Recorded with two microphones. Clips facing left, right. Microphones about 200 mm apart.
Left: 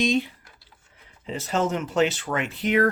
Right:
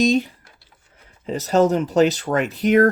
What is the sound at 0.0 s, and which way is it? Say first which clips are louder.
Speech: right 5 dB; 40° right (ahead or behind).